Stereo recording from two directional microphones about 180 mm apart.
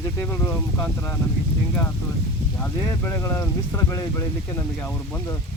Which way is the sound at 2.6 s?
10° left (ahead or behind).